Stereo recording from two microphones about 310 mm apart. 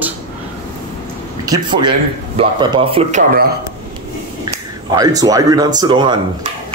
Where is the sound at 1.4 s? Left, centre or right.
Centre.